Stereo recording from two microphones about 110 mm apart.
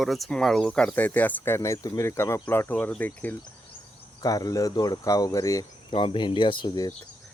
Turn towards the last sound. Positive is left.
turn(degrees=40)  # may be behind; listen again after turning